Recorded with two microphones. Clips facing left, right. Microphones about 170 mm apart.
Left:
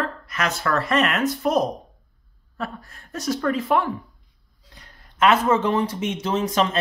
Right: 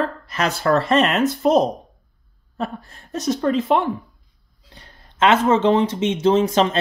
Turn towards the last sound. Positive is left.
turn(degrees=-30)  # may be behind; listen again after turning